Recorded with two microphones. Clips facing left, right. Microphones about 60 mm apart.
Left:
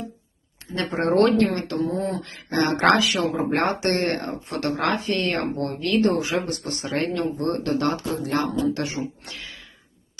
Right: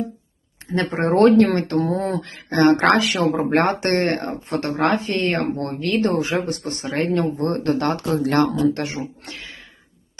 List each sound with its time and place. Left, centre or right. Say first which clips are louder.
0.7 s speech: right 3 dB; right
1.5 s speech: right 6 dB; right
1.8 s speech: right 3 dB; right
2.2 s speech: right 7 dB; right
6.6 s speech: right 3 dB; right
8.7 s speech: right 1 dB; right
9.2 s a sound: right 2 dB; right